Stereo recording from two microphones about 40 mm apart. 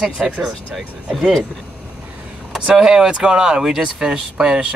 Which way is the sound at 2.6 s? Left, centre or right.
Centre.